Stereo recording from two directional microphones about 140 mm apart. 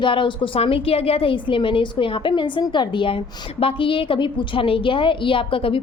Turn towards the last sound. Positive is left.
turn(degrees=40)  # may be behind; listen again after turning